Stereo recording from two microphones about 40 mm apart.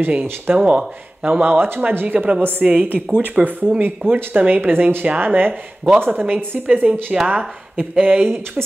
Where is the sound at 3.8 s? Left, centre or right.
Right.